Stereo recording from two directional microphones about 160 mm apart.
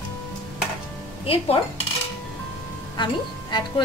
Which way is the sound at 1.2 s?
35° left (ahead or behind).